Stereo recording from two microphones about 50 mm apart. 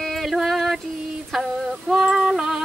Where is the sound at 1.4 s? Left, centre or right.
Centre.